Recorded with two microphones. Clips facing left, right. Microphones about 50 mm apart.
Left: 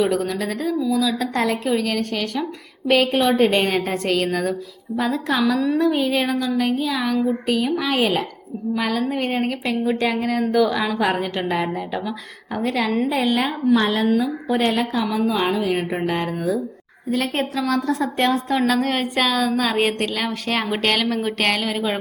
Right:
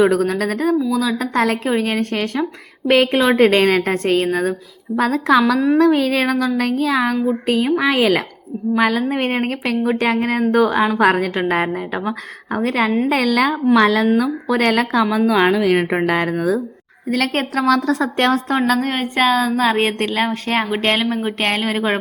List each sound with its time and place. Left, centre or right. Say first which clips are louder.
0.0 s a woman's voice: right 5 dB; right
4.0 s a woman's voice: right 4 dB; right
4.9 s speech: right 6 dB; right
7.9 s speech: right 2 dB; right
8.7 s a woman's voice: right 5 dB; right
10.4 s a woman's voice: right 4 dB; right
10.9 s speech: right 6 dB; right
11.3 s a woman's voice: right 4 dB; right
13.1 s a woman's voice: right 4 dB; right
17.7 s speech: right 7 dB; right
18.5 s a woman's voice: right 2 dB; right